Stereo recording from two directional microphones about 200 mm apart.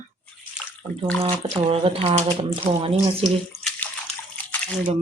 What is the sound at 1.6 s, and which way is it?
Speech, 30° right (ahead or behind).